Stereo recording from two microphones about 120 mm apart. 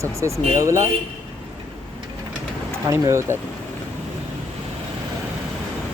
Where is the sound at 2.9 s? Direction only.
25° right (ahead or behind).